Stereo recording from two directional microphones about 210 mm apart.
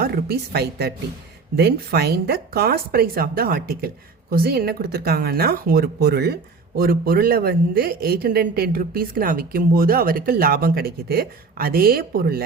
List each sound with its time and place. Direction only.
0.0 s speech: 50° right (ahead or behind)